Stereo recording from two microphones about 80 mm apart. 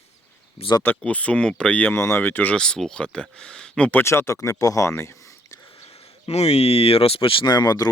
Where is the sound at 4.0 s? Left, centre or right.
Left.